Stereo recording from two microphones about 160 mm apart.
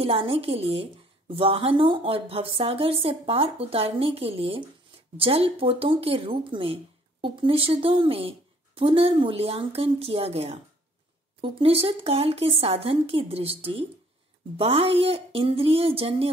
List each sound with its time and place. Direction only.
0.0 s speech: 35° right (ahead or behind)